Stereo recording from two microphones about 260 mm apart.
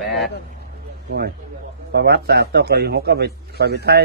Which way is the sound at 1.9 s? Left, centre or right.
Right.